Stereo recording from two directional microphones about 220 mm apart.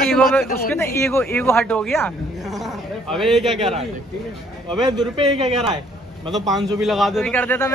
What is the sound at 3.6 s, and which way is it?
A man's voice, 30° right (ahead or behind).